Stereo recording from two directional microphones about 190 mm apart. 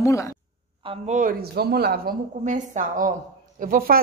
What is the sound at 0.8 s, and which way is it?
Speech, 35° right (ahead or behind).